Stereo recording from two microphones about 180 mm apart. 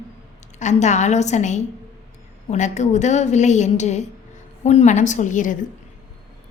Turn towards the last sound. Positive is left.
turn(degrees=45)  # may be behind; listen again after turning